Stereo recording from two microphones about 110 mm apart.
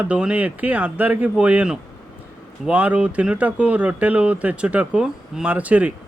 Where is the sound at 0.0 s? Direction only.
10° right (ahead or behind).